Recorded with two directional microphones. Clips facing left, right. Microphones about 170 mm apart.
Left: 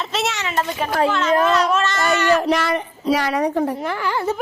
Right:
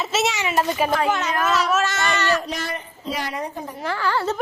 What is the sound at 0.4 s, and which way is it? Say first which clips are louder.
A child's voice: right 2 dB; 15° right (ahead or behind).